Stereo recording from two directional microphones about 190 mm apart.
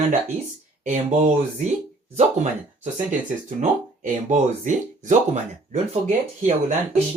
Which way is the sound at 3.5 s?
40° right (ahead or behind).